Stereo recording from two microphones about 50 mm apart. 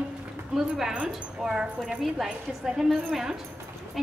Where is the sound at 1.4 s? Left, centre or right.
Centre.